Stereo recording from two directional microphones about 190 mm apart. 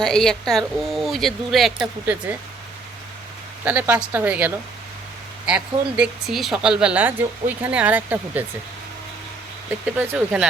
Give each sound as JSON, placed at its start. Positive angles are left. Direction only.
{"t": 0.0, "sound": "speech", "side_deg": 5}
{"t": 3.6, "sound": "speech", "side_deg": -10}
{"t": 9.8, "sound": "speech", "side_deg": -10}